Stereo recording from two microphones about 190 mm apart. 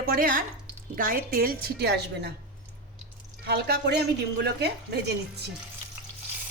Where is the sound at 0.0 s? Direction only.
50° right (ahead or behind).